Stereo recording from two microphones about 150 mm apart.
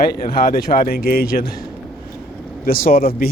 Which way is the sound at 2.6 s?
75° left (ahead or behind).